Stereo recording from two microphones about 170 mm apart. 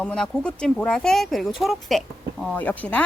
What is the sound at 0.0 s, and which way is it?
Speech, 5° left (ahead or behind).